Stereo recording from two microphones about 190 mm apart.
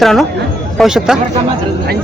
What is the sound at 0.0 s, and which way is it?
A man's voice, centre (ahead or behind).